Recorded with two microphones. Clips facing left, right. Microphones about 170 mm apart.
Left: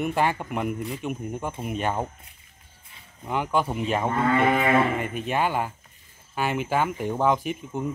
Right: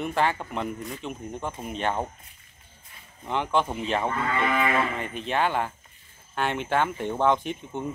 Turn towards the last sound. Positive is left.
turn(degrees=5)  # may be behind; listen again after turning